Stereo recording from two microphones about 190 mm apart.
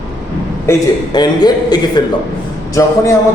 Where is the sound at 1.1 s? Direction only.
20° left (ahead or behind).